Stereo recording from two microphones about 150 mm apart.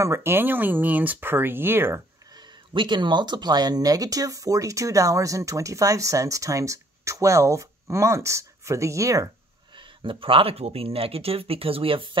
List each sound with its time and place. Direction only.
0.0 s speech: 15° right (ahead or behind)
2.3 s speech: 30° right (ahead or behind)
9.8 s speech: 35° right (ahead or behind)